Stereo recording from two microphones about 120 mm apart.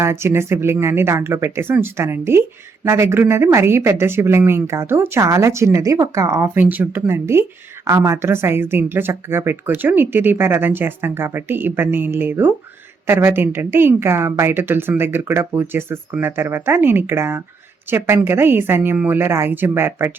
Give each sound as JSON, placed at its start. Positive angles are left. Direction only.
{"t": 0.0, "sound": "a woman's voice", "side_deg": -20}